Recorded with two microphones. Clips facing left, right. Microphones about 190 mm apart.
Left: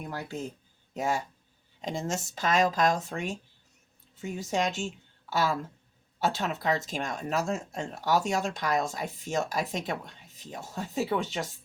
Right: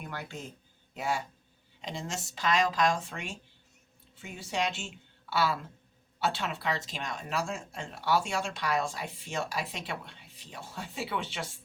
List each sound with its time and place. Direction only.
0.1 s speech: 40° left (ahead or behind)